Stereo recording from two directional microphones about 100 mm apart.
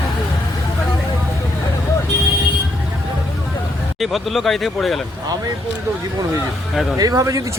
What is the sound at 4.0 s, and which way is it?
Speech, centre (ahead or behind).